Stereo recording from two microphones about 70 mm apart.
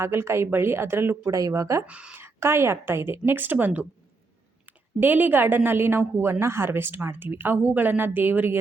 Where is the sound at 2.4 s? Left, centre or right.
Right.